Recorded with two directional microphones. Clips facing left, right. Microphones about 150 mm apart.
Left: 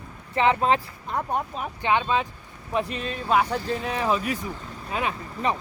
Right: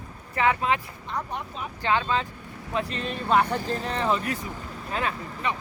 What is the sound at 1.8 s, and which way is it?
Speech, 15° left (ahead or behind).